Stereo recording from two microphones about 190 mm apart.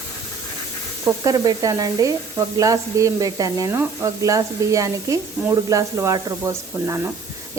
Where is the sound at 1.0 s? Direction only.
20° right (ahead or behind).